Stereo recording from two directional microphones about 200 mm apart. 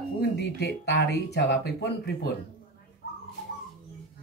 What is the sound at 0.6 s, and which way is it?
A woman's voice, 55° left (ahead or behind).